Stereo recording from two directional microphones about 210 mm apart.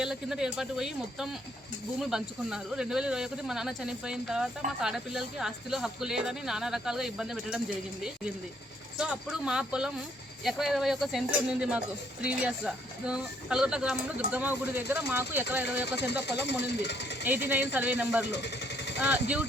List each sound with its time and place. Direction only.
0.0 s speech: centre (ahead or behind)
9.0 s speech: 5° right (ahead or behind)
14.8 s speech: 50° left (ahead or behind)
15.1 s speech: 10° right (ahead or behind)
16.2 s speech: 55° left (ahead or behind)
17.2 s speech: 10° right (ahead or behind)
18.3 s speech: 55° left (ahead or behind)